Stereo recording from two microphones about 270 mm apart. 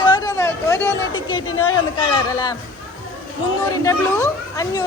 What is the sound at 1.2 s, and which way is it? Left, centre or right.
Speech, left.